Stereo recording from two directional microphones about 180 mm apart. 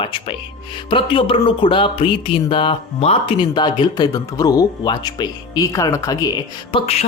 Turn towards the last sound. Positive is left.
turn(degrees=35)  # may be behind; listen again after turning